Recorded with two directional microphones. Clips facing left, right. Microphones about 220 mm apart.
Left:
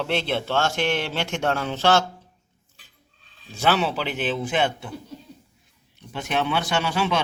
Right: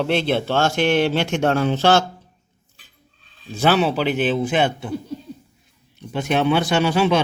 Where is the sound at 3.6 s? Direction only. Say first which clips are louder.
Right 5 dB; 10° right (ahead or behind).